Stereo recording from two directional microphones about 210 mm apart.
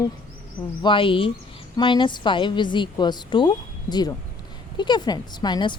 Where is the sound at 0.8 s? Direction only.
25° left (ahead or behind).